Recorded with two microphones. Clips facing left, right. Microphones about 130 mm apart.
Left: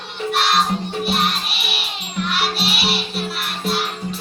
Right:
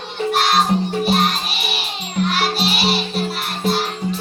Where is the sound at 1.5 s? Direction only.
Centre (ahead or behind).